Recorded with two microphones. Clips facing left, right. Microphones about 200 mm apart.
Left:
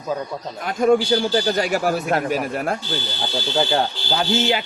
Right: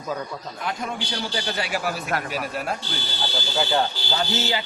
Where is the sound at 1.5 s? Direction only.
45° left (ahead or behind).